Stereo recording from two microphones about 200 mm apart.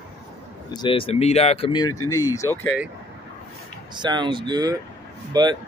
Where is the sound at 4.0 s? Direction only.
20° right (ahead or behind).